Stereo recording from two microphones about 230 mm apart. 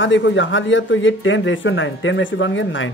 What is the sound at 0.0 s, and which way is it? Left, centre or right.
Speech, left.